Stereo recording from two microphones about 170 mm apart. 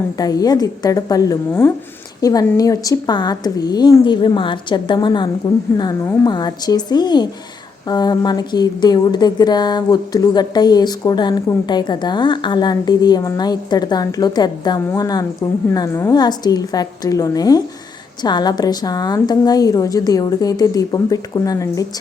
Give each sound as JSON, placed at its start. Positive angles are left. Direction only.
{"t": 0.2, "sound": "a woman's voice", "side_deg": 20}